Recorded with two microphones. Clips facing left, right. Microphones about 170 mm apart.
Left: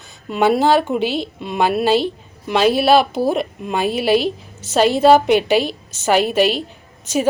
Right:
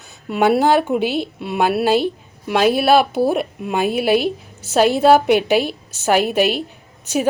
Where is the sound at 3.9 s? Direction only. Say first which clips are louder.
Left 1 dB; 55° right (ahead or behind).